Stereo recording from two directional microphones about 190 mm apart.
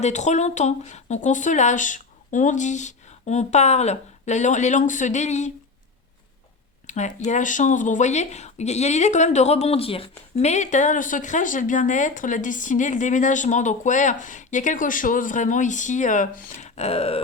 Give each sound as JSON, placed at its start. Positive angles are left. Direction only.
{"t": 0.0, "sound": "speech", "side_deg": 40}
{"t": 6.8, "sound": "a sound", "side_deg": 40}
{"t": 7.3, "sound": "speech", "side_deg": 40}